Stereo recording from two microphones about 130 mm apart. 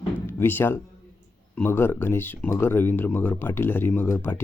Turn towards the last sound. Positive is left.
turn(degrees=15)  # may be behind; listen again after turning